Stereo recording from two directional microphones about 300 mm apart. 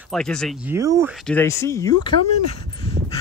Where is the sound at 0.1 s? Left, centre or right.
Centre.